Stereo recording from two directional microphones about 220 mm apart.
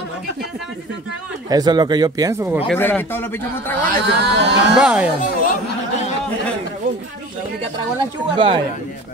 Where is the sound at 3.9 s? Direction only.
50° right (ahead or behind).